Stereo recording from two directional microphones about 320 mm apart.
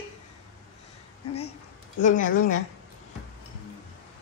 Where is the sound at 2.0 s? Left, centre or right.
Left.